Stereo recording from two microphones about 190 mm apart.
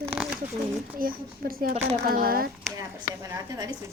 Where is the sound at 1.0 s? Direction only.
50° right (ahead or behind).